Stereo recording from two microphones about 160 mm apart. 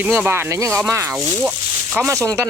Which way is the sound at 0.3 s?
15° right (ahead or behind).